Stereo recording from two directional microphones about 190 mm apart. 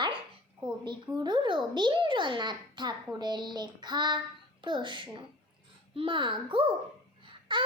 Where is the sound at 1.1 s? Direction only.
25° right (ahead or behind).